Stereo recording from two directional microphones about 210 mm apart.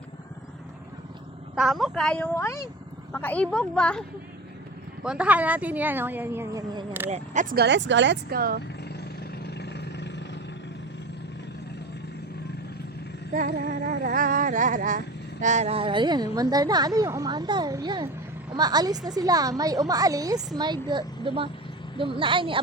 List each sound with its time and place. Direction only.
1.5 s speech: centre (ahead or behind)
5.0 s a woman's voice: 5° right (ahead or behind)
7.5 s speech: 55° right (ahead or behind)
9.4 s vehicle: 50° left (ahead or behind)
13.3 s a sound: 40° right (ahead or behind); by 18.1 s 20° right (ahead or behind)
18.5 s a woman's voice: 20° right (ahead or behind)
21.9 s a sound: 25° right (ahead or behind)